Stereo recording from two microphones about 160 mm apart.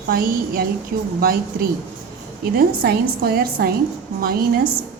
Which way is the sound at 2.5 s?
70° right (ahead or behind).